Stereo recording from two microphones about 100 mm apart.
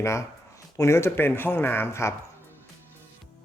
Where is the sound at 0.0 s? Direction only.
30° left (ahead or behind).